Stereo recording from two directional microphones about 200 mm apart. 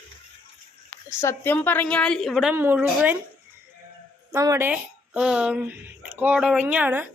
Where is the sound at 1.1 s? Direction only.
15° left (ahead or behind).